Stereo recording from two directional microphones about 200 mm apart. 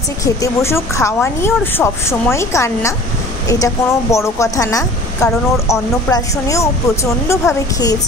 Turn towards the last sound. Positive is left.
turn(degrees=15)  # may be behind; listen again after turning